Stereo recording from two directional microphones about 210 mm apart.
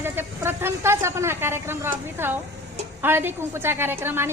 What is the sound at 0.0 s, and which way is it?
A woman's voice, 10° right (ahead or behind).